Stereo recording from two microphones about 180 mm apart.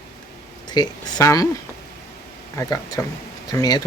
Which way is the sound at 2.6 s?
20° left (ahead or behind).